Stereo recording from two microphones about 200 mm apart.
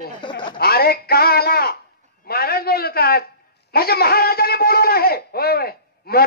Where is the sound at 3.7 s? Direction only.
50° left (ahead or behind).